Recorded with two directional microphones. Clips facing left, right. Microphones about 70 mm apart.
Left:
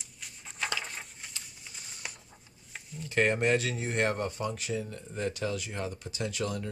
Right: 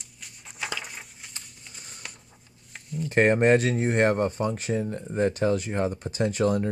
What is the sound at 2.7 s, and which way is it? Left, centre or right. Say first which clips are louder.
Stir: right 9 dB; centre.